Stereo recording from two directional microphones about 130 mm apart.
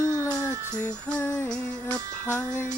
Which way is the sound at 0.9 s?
10° left (ahead or behind).